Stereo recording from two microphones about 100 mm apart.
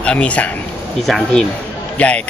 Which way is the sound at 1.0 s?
Centre (ahead or behind).